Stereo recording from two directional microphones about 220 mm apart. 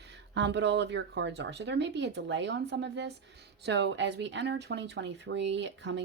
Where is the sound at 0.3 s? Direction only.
50° right (ahead or behind).